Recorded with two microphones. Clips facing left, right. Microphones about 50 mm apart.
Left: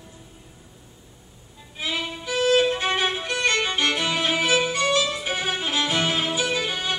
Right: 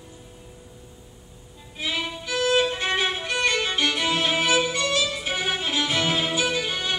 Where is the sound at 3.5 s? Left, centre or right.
Centre.